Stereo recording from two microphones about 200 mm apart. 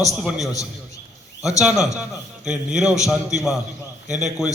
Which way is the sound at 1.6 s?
Centre (ahead or behind).